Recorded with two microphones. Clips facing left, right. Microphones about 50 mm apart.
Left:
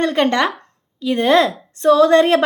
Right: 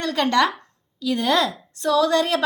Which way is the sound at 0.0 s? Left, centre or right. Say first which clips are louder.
Left 3 dB; left.